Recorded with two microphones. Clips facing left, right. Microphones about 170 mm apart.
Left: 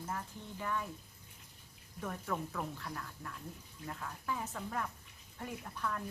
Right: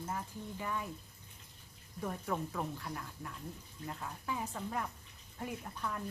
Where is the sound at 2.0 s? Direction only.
15° right (ahead or behind).